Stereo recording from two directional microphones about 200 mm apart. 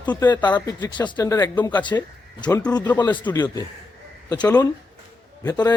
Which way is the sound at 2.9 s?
20° left (ahead or behind).